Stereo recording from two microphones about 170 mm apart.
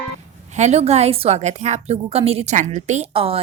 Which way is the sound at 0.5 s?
40° right (ahead or behind).